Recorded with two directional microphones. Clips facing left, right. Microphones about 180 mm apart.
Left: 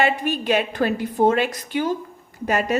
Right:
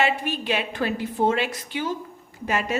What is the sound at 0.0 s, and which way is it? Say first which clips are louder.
A woman's voice: left 3 dB; 45° left (ahead or behind).